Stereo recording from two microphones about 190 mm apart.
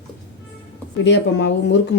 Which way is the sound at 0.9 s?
70° left (ahead or behind).